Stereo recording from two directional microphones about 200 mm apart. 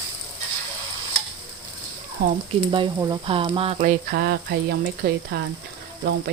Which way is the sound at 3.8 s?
45° right (ahead or behind).